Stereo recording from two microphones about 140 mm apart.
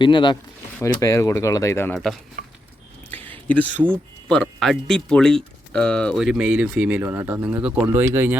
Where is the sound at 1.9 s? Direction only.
Centre (ahead or behind).